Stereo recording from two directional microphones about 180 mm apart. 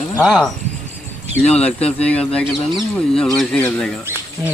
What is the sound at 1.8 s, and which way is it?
Speech, 35° left (ahead or behind).